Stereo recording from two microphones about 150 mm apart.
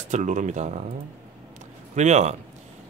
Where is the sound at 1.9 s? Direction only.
50° right (ahead or behind).